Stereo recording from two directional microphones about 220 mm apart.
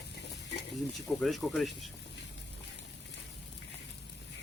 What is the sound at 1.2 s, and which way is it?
Speech, centre (ahead or behind).